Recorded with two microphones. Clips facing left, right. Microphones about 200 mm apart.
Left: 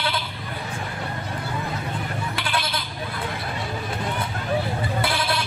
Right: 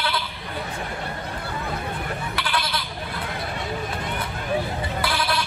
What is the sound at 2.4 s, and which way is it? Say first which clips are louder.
Goat: right 1 dB; 25° left (ahead or behind).